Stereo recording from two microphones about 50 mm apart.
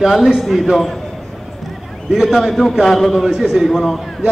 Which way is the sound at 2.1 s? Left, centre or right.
Centre.